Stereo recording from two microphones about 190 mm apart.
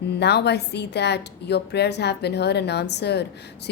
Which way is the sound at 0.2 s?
60° left (ahead or behind).